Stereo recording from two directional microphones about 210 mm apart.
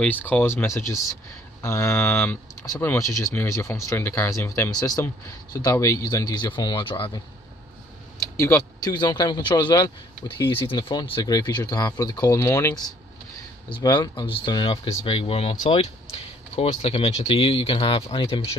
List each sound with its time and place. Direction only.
0.0 s speech: 10° left (ahead or behind); by 7.1 s 25° left (ahead or behind)
8.4 s speech: 15° left (ahead or behind)
13.7 s speech: 20° left (ahead or behind)